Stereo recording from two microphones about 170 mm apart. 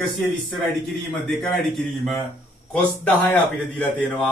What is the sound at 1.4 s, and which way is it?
A man's voice, centre (ahead or behind).